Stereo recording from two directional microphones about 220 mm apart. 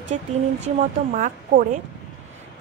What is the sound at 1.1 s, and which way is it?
Speech, 35° right (ahead or behind).